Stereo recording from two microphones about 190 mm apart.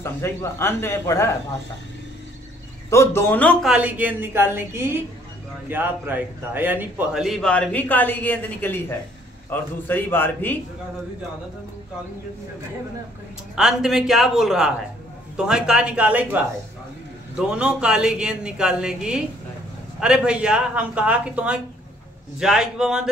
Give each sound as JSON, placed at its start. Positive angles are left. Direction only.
{"t": 0.0, "sound": "a man's voice", "side_deg": 15}
{"t": 2.9, "sound": "a man's voice", "side_deg": 15}
{"t": 13.6, "sound": "a man's voice", "side_deg": -5}